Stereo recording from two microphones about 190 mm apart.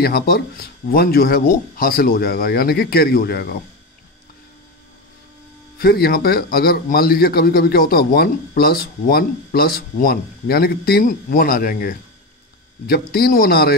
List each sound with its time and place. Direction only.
0.0 s speech: 55° left (ahead or behind)
5.8 s speech: 55° left (ahead or behind)